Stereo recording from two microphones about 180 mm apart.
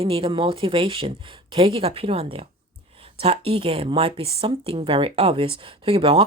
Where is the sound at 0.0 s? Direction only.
30° right (ahead or behind).